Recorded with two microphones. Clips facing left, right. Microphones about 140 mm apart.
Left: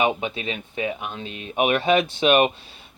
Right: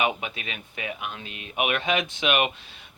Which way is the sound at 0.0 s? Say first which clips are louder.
Left 4 dB; 30° left (ahead or behind).